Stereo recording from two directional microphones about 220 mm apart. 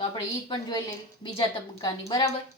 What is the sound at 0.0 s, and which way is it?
Speech, 20° left (ahead or behind).